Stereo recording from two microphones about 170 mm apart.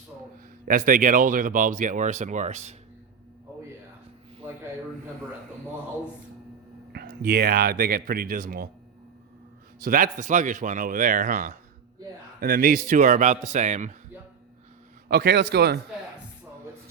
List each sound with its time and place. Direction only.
0.6 s speech: 55° right (ahead or behind)
6.9 s speech: 65° right (ahead or behind)
9.8 s speech: 55° right (ahead or behind)
15.1 s a man's voice: 70° right (ahead or behind)